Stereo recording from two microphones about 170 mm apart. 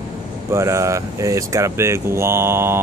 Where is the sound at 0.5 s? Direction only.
15° right (ahead or behind).